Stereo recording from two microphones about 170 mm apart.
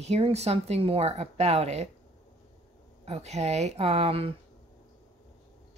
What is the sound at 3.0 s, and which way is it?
Speech, 40° right (ahead or behind).